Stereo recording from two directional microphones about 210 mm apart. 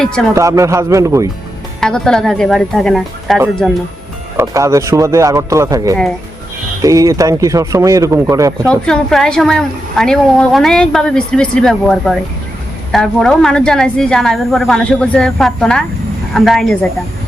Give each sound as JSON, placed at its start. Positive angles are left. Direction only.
{"t": 0.0, "sound": "a woman's voice", "side_deg": 5}
{"t": 0.3, "sound": "speech", "side_deg": -15}
{"t": 1.8, "sound": "a woman's voice", "side_deg": 5}
{"t": 4.4, "sound": "speech", "side_deg": -15}
{"t": 8.7, "sound": "a woman's voice", "side_deg": 5}